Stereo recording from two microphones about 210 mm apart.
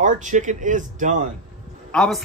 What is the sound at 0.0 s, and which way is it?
Speech, 35° right (ahead or behind).